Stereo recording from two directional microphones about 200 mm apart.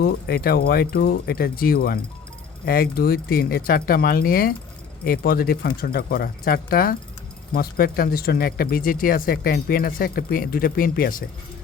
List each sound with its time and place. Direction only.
0.0 s speech: 50° left (ahead or behind)